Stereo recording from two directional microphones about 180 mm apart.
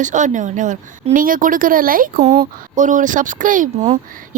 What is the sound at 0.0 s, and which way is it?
A woman's voice, 45° right (ahead or behind).